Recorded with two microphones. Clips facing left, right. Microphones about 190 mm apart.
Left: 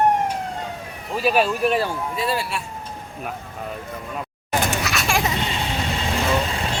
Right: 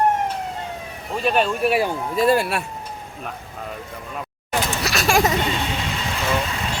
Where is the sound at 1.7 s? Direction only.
15° right (ahead or behind).